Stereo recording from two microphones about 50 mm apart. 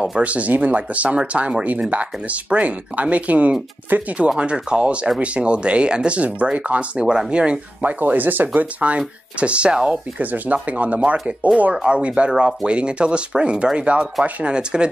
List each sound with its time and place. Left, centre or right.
0.2 s speech: right
4.4 s speech: right
7.8 s speech: right
8.8 s speech: right